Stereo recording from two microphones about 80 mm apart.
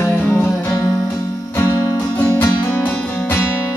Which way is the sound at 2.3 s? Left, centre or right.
Left.